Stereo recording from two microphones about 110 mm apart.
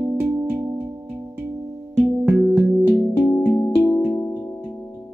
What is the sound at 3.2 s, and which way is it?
Music, 30° left (ahead or behind).